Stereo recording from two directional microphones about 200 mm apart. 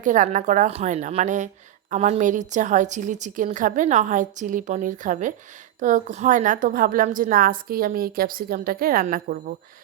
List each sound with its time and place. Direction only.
0.0 s a woman's voice: 40° right (ahead or behind)